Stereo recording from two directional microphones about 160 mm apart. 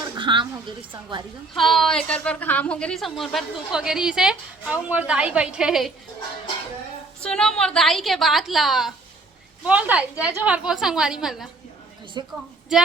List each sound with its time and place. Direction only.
0.0 s a woman's voice: 30° right (ahead or behind)
1.5 s a woman's voice: centre (ahead or behind)
7.2 s a woman's voice: 5° left (ahead or behind)
12.2 s a woman's voice: 25° right (ahead or behind)
12.7 s a woman's voice: 5° right (ahead or behind)